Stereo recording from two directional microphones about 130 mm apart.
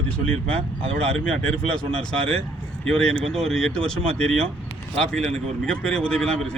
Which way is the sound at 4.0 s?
50° right (ahead or behind).